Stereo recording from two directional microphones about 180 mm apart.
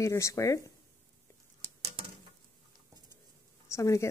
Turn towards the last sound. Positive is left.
turn(degrees=15)  # may be behind; listen again after turning